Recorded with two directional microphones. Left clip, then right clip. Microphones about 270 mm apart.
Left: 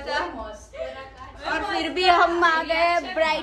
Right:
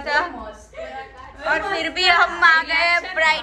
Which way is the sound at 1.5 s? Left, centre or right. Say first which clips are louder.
Right 4 dB; centre.